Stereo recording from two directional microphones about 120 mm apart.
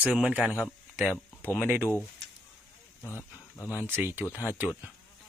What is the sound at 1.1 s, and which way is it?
Speech, 15° left (ahead or behind).